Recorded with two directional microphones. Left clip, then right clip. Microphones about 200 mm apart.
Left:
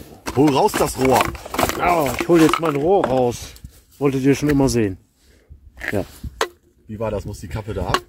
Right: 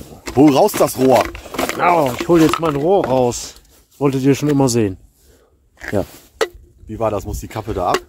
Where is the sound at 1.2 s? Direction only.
10° left (ahead or behind).